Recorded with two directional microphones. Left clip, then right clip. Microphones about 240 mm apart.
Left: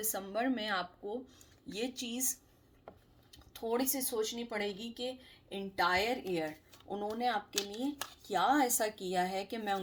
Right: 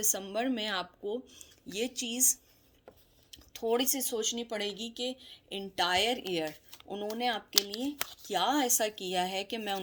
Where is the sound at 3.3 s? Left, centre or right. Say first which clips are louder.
Right 5 dB; right.